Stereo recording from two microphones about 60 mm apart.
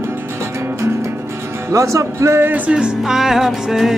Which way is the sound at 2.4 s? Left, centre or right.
Right.